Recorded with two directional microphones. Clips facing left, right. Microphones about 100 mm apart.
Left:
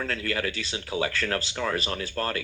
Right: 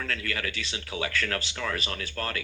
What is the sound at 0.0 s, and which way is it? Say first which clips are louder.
Speech: left 4 dB; 30° left (ahead or behind).